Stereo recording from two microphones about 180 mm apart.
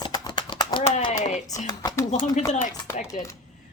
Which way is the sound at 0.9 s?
40° left (ahead or behind).